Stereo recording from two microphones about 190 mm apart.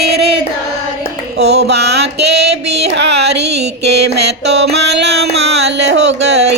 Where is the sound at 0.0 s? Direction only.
60° right (ahead or behind).